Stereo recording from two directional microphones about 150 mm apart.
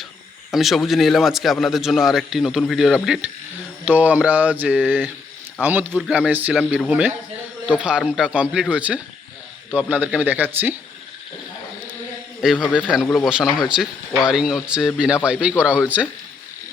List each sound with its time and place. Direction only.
0.5 s a man's voice: centre (ahead or behind)
12.4 s a man's voice: centre (ahead or behind)